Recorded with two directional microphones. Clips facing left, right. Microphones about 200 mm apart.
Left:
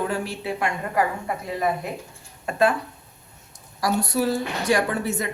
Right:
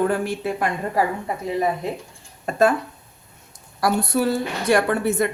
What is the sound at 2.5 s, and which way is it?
Speech, 45° right (ahead or behind).